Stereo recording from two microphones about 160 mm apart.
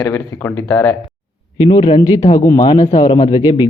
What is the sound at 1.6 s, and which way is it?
A man's voice, 35° left (ahead or behind).